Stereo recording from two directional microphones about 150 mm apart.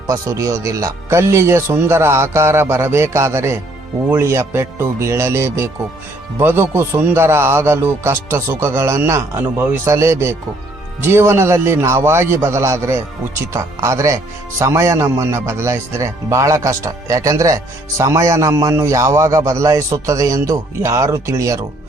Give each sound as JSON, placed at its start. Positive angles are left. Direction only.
{"t": 0.1, "sound": "speech", "side_deg": -20}